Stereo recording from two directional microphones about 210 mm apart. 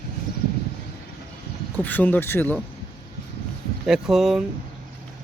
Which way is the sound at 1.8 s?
10° left (ahead or behind).